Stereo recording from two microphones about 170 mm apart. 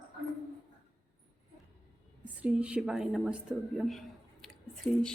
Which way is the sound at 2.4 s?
5° right (ahead or behind).